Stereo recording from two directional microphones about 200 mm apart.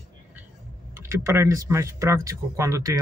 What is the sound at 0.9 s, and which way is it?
Speech, 10° right (ahead or behind).